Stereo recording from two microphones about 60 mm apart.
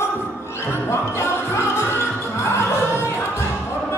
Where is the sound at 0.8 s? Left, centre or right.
Left.